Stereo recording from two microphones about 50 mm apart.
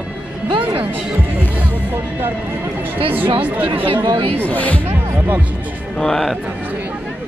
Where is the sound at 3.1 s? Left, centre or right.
Right.